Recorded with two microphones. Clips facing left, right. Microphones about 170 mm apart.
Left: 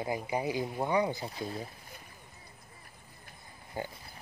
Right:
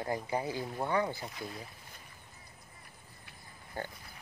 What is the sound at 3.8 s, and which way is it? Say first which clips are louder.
Speech: left 2 dB; 15° left (ahead or behind).